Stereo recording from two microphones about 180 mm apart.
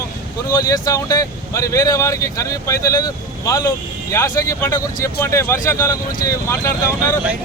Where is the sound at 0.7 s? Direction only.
20° left (ahead or behind).